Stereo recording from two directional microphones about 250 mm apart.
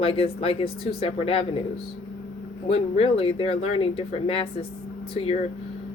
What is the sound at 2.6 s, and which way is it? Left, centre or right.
Speech, left.